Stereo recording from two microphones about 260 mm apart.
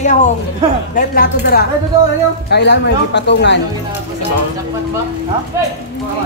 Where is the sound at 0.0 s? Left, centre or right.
Left.